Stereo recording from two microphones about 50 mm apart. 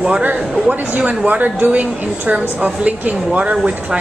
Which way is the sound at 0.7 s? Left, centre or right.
Right.